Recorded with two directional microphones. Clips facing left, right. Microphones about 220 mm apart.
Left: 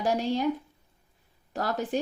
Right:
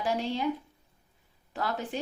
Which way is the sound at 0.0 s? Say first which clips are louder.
Left 4 dB; 40° left (ahead or behind).